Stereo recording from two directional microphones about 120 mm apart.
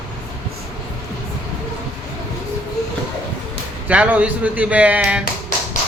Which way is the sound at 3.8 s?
10° right (ahead or behind).